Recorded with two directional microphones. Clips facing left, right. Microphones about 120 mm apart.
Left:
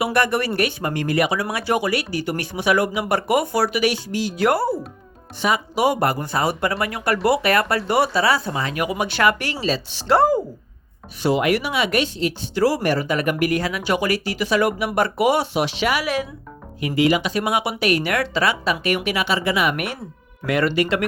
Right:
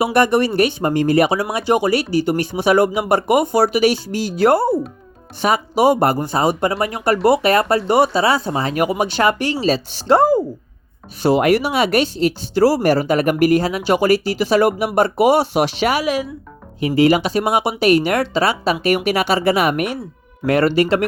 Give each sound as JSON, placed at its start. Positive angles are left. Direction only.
{"t": 0.0, "sound": "speech", "side_deg": -25}
{"t": 5.4, "sound": "speech", "side_deg": -35}
{"t": 10.1, "sound": "speech", "side_deg": -15}
{"t": 11.2, "sound": "speech", "side_deg": -40}
{"t": 15.5, "sound": "speech", "side_deg": -45}